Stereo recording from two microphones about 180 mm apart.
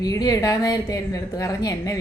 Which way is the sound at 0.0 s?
20° left (ahead or behind).